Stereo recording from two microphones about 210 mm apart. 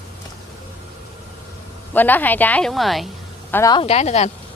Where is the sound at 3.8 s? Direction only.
30° left (ahead or behind).